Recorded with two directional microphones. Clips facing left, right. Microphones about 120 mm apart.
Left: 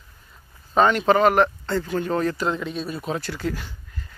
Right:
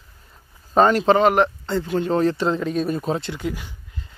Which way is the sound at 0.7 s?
35° right (ahead or behind).